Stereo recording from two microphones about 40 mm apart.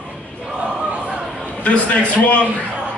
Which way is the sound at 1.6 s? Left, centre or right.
Left.